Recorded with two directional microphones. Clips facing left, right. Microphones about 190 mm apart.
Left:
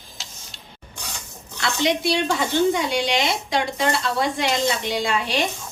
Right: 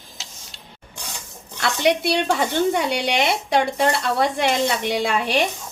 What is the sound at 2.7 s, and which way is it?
Speech, 60° right (ahead or behind).